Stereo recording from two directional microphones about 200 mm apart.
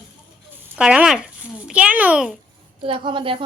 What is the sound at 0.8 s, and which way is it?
A child's voice, 5° right (ahead or behind).